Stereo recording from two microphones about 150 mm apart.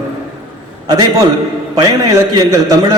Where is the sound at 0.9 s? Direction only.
25° right (ahead or behind).